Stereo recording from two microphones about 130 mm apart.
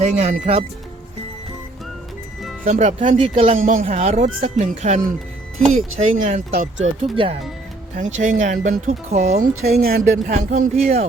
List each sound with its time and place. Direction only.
0.0 s speech: 55° right (ahead or behind)
2.6 s speech: 70° right (ahead or behind)
3.2 s speech: 45° right (ahead or behind)
3.6 s speech: 85° right
3.9 s speech: 60° right (ahead or behind)
6.0 s speech: 65° right (ahead or behind)
7.0 s speech: 45° right (ahead or behind)
7.9 s speech: 75° right (ahead or behind)